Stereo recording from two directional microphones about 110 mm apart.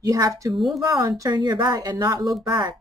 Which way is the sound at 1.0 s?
35° right (ahead or behind).